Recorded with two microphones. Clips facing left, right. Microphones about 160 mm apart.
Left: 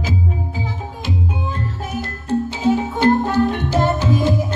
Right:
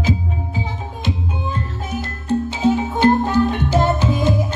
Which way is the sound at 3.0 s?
15° right (ahead or behind).